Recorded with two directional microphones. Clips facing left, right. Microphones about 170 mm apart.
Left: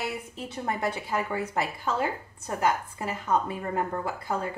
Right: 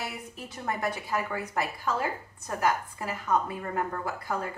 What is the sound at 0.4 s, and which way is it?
A woman's voice, 25° left (ahead or behind).